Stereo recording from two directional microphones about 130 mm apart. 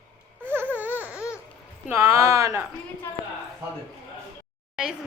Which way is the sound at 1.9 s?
20° right (ahead or behind).